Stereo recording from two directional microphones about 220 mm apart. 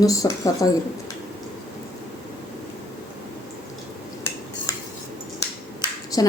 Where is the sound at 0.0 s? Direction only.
15° left (ahead or behind).